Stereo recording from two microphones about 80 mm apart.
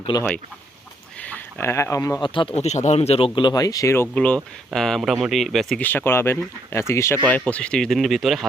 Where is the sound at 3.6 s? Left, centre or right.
Left.